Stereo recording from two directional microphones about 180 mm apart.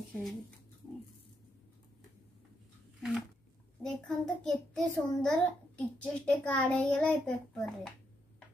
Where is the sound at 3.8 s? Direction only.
Centre (ahead or behind).